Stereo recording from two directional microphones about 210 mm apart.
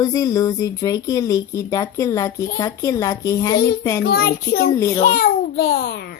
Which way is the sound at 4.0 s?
50° left (ahead or behind).